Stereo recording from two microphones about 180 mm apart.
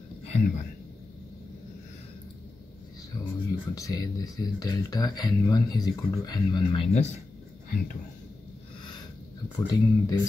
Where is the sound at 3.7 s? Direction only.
20° left (ahead or behind); by 7.1 s 35° left (ahead or behind).